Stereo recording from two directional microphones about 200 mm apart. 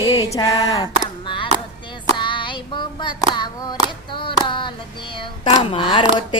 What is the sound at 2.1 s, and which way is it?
Clapping, 25° left (ahead or behind).